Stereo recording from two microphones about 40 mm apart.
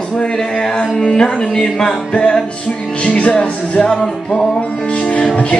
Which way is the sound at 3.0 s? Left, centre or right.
Left.